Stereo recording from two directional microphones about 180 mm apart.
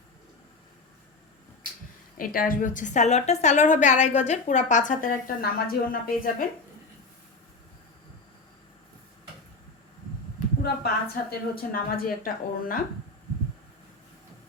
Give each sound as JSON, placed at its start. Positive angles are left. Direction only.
{"t": 2.1, "sound": "a woman's voice", "side_deg": 50}
{"t": 10.6, "sound": "a woman's voice", "side_deg": 60}